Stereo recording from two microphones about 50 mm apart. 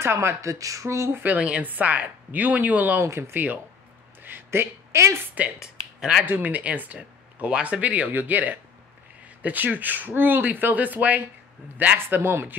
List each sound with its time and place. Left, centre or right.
0.0 s speech: right
1.2 s speech: right
3.0 s speech: right
4.2 s a sound: right
5.6 s a sound: centre
6.2 s speech: right
12.1 s speech: right